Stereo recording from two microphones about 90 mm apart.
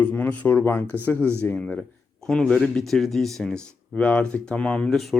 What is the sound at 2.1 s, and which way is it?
Speech, 5° left (ahead or behind).